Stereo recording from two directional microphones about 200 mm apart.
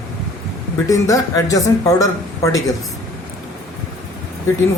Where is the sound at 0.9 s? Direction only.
15° left (ahead or behind).